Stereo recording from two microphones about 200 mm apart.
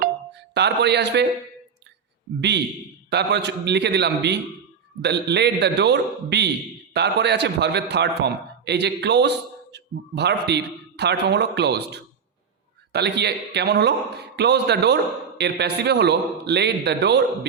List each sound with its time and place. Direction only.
0.5 s a man's voice: 55° right (ahead or behind)
3.1 s a man's voice: 55° right (ahead or behind)